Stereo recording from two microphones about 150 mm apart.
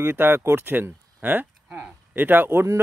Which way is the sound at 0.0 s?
15° right (ahead or behind).